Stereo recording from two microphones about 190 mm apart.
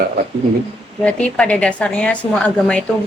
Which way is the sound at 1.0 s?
5° left (ahead or behind).